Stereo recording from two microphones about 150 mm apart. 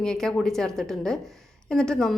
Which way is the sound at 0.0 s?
5° left (ahead or behind).